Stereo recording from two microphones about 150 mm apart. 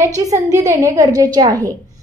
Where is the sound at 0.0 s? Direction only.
20° right (ahead or behind).